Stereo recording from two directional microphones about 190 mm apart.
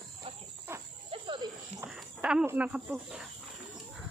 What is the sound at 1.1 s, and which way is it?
Snake, 25° right (ahead or behind).